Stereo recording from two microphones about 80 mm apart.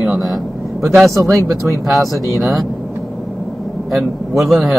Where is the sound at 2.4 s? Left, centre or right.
Centre.